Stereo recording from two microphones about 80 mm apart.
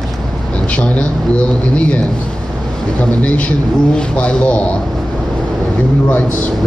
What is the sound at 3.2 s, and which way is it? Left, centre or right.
Speech, centre.